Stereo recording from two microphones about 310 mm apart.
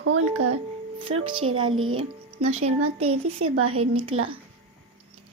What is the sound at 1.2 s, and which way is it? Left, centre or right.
Speech, centre.